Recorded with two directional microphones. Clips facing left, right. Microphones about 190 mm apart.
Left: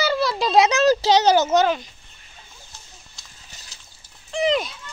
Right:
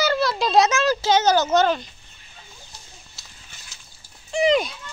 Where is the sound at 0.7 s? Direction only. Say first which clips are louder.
Left 3 dB; 35° left (ahead or behind).